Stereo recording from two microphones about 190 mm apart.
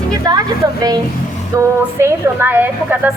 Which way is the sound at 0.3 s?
20° right (ahead or behind).